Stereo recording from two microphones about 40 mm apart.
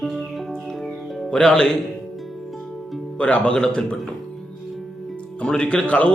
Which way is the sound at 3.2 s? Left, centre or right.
Left.